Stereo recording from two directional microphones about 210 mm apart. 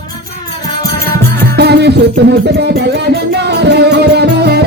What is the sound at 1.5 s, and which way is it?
Music, 55° right (ahead or behind).